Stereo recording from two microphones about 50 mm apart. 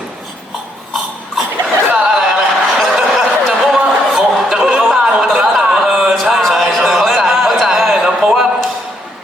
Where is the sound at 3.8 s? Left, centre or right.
Right.